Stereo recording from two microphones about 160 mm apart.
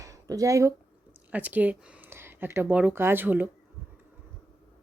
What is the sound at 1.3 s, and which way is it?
Speech, 10° right (ahead or behind).